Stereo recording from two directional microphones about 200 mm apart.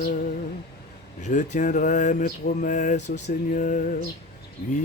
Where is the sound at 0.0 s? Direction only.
45° left (ahead or behind).